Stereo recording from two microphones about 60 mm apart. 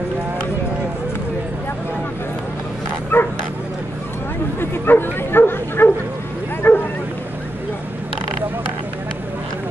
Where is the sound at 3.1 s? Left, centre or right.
Left.